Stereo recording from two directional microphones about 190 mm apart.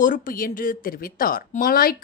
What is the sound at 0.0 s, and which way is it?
Speech, 45° left (ahead or behind).